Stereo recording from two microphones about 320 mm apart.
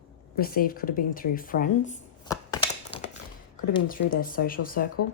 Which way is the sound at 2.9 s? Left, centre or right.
Centre.